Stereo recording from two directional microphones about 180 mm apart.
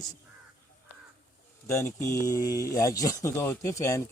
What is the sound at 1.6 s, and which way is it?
Speech, 15° left (ahead or behind).